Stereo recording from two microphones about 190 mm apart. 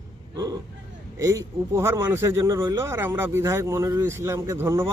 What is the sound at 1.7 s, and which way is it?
A man's voice, 15° right (ahead or behind).